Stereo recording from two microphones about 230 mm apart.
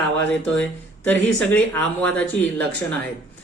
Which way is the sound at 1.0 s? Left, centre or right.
Centre.